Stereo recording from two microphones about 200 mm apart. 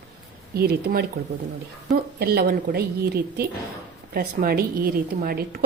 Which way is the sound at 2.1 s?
50° right (ahead or behind).